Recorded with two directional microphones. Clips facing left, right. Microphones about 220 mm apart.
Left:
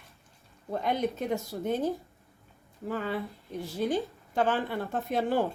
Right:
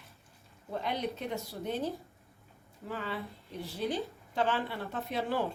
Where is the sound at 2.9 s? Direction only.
45° left (ahead or behind).